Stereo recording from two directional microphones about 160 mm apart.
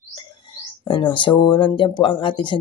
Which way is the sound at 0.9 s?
30° left (ahead or behind).